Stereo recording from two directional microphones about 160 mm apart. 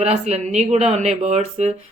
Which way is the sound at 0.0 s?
45° right (ahead or behind).